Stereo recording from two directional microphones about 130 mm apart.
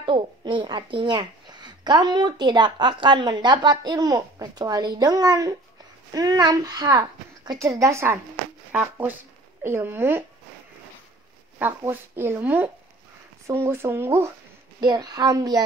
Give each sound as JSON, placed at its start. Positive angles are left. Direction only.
{"t": 0.0, "sound": "a woman's voice", "side_deg": -40}
{"t": 9.6, "sound": "speech", "side_deg": -20}
{"t": 11.5, "sound": "speech", "side_deg": -15}
{"t": 14.8, "sound": "a woman's voice", "side_deg": -30}